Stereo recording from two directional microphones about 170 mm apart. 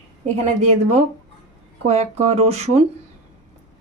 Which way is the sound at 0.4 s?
40° right (ahead or behind).